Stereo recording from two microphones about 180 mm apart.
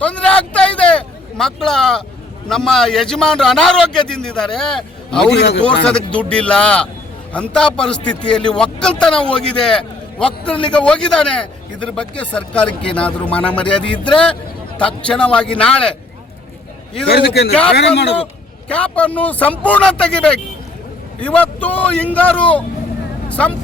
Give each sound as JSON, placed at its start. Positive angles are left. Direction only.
{"t": 0.0, "sound": "a man's voice", "side_deg": 5}
{"t": 5.3, "sound": "speech", "side_deg": 70}
{"t": 5.8, "sound": "a man's voice", "side_deg": 5}
{"t": 17.5, "sound": "a man's voice", "side_deg": 5}
{"t": 17.7, "sound": "speech", "side_deg": 70}
{"t": 18.7, "sound": "speech", "side_deg": 5}